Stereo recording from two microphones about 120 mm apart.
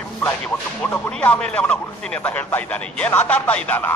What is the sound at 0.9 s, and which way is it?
A man's voice, 10° left (ahead or behind).